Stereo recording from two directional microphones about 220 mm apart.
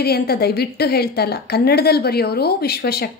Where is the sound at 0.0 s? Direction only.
45° left (ahead or behind).